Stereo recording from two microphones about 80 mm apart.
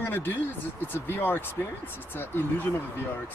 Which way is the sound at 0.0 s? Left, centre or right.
Left.